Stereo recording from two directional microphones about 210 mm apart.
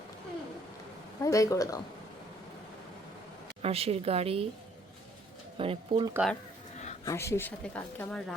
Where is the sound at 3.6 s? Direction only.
30° right (ahead or behind).